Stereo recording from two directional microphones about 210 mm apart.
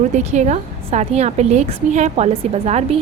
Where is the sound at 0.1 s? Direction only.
35° right (ahead or behind).